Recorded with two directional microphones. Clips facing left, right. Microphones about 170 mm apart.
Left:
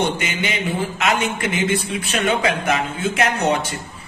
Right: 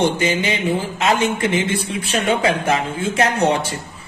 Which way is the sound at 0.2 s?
30° right (ahead or behind).